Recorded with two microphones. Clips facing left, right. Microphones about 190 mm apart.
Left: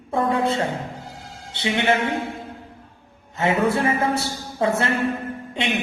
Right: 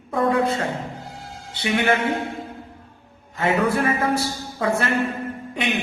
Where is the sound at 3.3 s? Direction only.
25° left (ahead or behind).